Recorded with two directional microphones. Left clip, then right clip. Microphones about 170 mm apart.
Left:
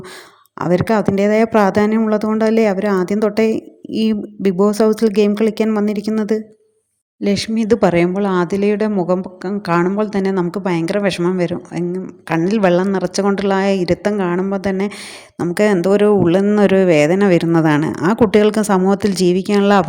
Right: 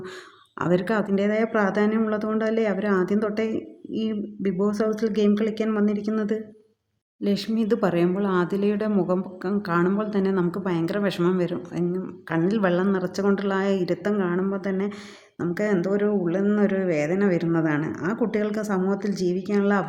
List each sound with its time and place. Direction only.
0.6 s a woman's voice: 25° left (ahead or behind); by 19.8 s 45° left (ahead or behind)